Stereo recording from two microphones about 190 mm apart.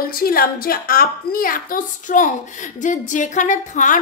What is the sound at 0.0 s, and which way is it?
A woman's voice, 50° left (ahead or behind).